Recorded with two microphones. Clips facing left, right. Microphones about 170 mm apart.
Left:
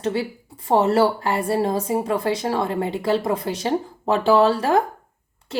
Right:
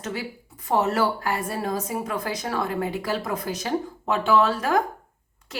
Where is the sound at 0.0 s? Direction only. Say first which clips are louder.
Left 8 dB; 30° left (ahead or behind).